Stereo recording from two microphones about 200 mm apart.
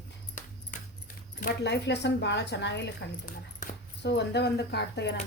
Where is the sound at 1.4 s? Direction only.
60° left (ahead or behind).